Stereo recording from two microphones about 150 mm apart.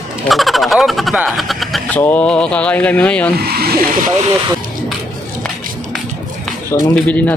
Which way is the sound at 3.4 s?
90° right.